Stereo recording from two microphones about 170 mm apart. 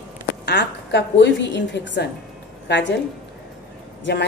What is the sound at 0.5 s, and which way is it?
A woman's voice, 90° left.